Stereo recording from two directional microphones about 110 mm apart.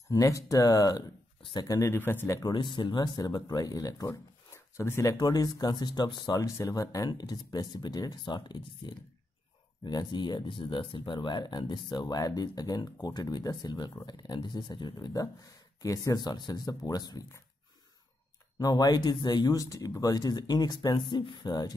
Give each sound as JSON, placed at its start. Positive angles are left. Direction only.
{"t": 0.1, "sound": "speech", "side_deg": 30}
{"t": 2.5, "sound": "speech", "side_deg": 45}
{"t": 18.6, "sound": "speech", "side_deg": 35}